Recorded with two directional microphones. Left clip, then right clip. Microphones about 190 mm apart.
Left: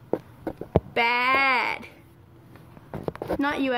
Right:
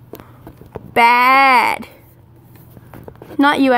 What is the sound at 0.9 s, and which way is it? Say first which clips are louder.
Speech: right 13 dB; 55° right (ahead or behind).